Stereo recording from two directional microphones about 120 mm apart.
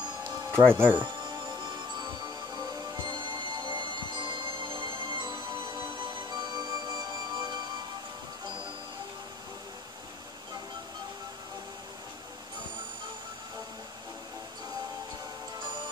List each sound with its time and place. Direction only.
0.5 s speech: 20° right (ahead or behind)
3.1 s music: 40° right (ahead or behind)